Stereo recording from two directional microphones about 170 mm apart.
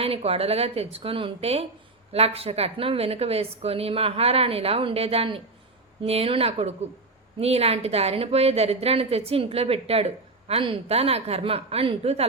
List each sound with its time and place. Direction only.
0.0 s a woman's voice: 35° right (ahead or behind)